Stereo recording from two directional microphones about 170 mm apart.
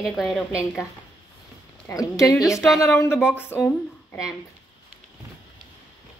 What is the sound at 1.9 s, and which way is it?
Speech, 20° left (ahead or behind).